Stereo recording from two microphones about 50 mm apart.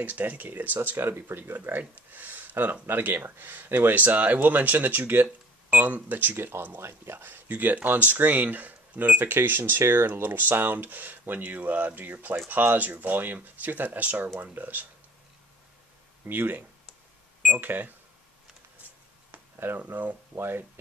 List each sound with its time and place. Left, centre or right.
0.0 s speech: right
0.7 s speech: right
6.3 s speech: right
7.2 s speech: right
9.3 s speech: right
16.3 s speech: right
19.9 s speech: right
20.3 s speech: right